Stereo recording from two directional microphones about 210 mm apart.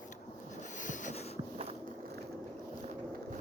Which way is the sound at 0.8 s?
35° left (ahead or behind).